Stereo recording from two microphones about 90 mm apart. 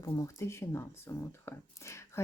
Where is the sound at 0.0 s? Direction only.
35° left (ahead or behind).